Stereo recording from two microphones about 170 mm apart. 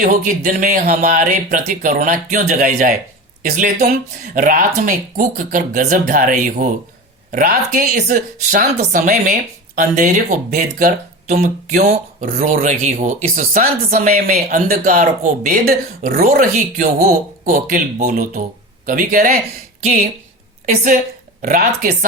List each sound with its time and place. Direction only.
0.0 s speech: 50° right (ahead or behind)
21.4 s speech: 55° right (ahead or behind)